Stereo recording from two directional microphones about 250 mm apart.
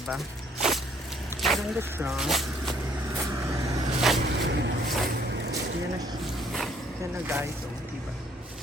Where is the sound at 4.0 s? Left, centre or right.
Centre.